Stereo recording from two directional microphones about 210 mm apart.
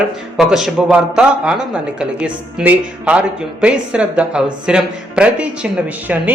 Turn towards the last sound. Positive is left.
turn(degrees=-5)  # may be behind; listen again after turning